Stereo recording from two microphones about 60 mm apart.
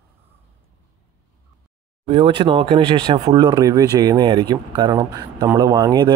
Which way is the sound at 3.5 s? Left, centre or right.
Right.